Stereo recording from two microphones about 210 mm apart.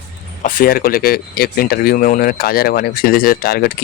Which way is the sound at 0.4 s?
45° left (ahead or behind).